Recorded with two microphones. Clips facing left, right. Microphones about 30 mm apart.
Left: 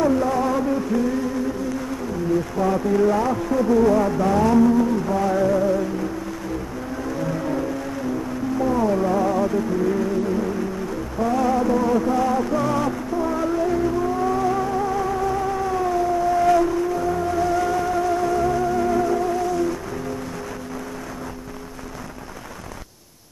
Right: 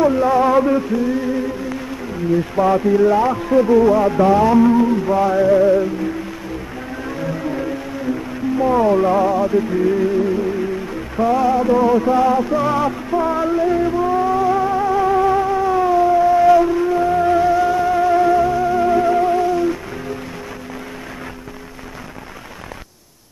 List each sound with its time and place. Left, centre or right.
0.0 s a sound: right
0.9 s speech: right
2.5 s speech: right
2.9 s speech: centre
7.2 s music: centre
8.5 s speech: right
9.3 s music: centre
9.7 s speech: right
12.4 s music: centre
15.4 s a sound: right
17.5 s music: right